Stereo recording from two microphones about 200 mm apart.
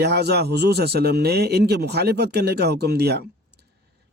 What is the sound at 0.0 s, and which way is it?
A man's voice, 55° right (ahead or behind).